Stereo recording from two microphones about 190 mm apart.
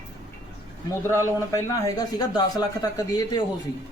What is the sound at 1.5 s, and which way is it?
Speech, 15° left (ahead or behind).